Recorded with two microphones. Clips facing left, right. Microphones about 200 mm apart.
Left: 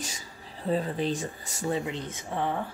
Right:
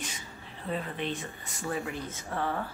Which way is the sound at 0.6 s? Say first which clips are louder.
Left 6 dB; 35° left (ahead or behind).